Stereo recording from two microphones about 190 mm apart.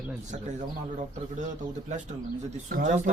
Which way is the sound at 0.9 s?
40° right (ahead or behind).